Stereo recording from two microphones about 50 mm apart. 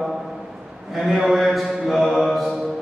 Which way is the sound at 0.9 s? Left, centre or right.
Centre.